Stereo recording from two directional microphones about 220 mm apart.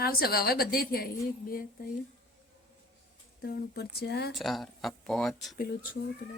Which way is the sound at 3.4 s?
45° left (ahead or behind).